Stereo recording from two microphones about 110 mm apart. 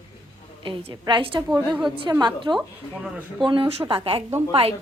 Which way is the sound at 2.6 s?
10° right (ahead or behind).